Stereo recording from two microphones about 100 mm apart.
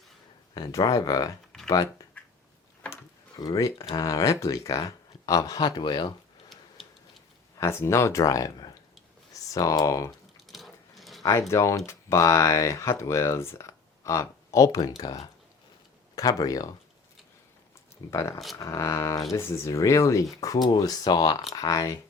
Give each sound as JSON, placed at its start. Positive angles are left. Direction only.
{"t": 0.5, "sound": "speech", "side_deg": 40}
{"t": 3.3, "sound": "speech", "side_deg": 40}
{"t": 7.6, "sound": "speech", "side_deg": 25}
{"t": 10.5, "sound": "sewing machine", "side_deg": 0}
{"t": 11.2, "sound": "speech", "side_deg": 30}
{"t": 18.1, "sound": "speech", "side_deg": 30}